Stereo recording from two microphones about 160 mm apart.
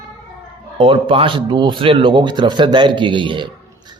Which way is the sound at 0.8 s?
35° right (ahead or behind).